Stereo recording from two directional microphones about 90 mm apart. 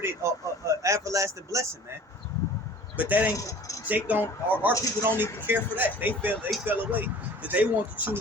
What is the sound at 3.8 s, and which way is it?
Speech, 20° right (ahead or behind).